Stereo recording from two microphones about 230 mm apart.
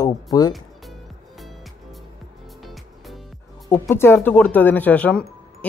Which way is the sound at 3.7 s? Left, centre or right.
Centre.